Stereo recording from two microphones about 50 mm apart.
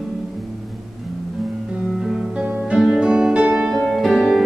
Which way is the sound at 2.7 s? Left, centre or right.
Centre.